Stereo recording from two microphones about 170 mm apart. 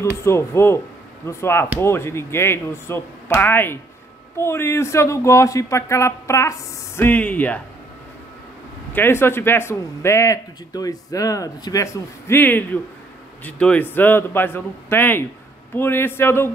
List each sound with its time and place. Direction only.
0.0 s speech: 15° left (ahead or behind)
8.9 s speech: 15° left (ahead or behind)